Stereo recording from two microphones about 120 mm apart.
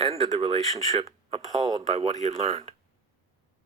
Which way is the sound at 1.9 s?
65° right (ahead or behind).